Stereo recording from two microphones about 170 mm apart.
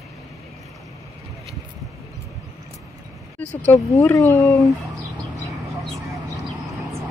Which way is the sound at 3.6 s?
15° left (ahead or behind).